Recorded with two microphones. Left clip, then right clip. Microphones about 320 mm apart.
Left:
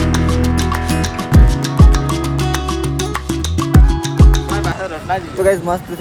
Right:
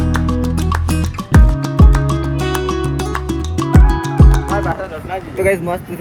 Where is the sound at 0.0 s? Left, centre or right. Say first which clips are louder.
Left 2 dB; centre.